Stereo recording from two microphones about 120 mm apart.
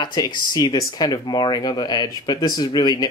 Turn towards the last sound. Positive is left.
turn(degrees=35)  # may be behind; listen again after turning